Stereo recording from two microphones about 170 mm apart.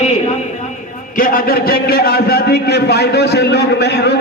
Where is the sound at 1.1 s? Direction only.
55° left (ahead or behind).